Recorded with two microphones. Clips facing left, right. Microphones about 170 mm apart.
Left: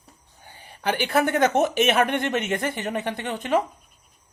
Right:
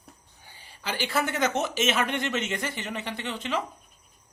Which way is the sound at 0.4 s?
55° left (ahead or behind).